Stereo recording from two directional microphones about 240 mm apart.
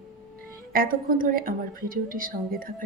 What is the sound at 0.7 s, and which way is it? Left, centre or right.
A woman's voice, right.